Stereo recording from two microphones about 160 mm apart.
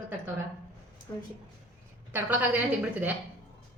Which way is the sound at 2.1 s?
10° right (ahead or behind).